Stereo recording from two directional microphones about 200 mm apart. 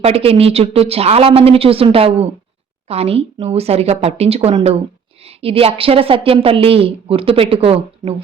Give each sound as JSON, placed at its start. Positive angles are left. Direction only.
{"t": 0.0, "sound": "a woman's voice", "side_deg": -30}